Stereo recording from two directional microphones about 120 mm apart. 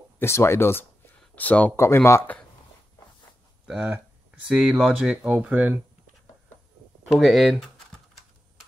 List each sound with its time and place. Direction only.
0.2 s speech: 20° left (ahead or behind)
3.6 s speech: 10° right (ahead or behind)
7.1 s speech: centre (ahead or behind)